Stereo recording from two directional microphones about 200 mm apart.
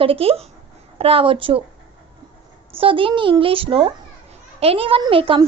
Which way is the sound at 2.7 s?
25° right (ahead or behind).